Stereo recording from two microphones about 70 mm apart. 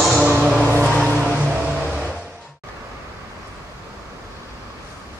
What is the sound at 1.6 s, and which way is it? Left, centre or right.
Vehicle, centre.